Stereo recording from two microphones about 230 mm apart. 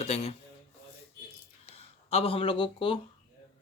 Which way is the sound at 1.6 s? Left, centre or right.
Left.